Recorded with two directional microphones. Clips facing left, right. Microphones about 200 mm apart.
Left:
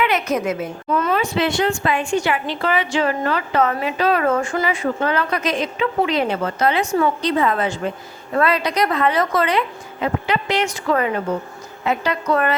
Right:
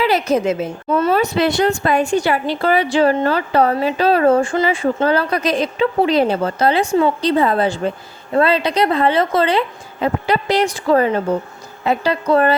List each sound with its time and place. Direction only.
0.0 s a woman's voice: 30° right (ahead or behind)